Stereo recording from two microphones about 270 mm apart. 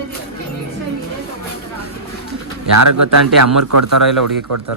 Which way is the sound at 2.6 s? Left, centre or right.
Right.